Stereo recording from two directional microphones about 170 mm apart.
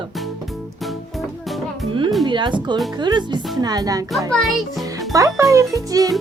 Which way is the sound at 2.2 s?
30° right (ahead or behind).